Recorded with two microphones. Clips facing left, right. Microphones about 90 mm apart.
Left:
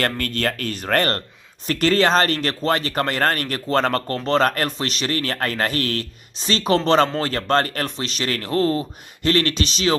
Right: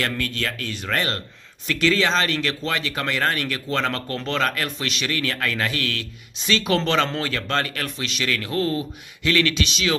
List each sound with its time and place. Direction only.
0.0 s speech: 50° left (ahead or behind)